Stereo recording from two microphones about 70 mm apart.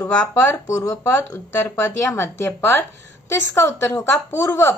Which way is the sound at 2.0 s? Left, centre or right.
Left.